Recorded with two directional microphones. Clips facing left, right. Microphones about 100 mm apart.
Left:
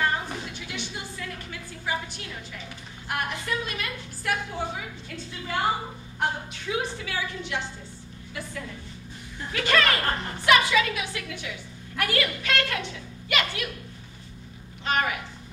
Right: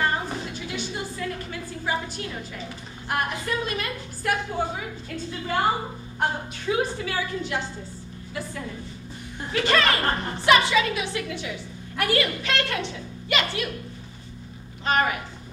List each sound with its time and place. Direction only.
0.0 s a sound: 40° right (ahead or behind)
3.1 s a woman's voice: 40° right (ahead or behind)
9.5 s a woman's voice: 30° right (ahead or behind)
14.9 s a woman's voice: 40° right (ahead or behind)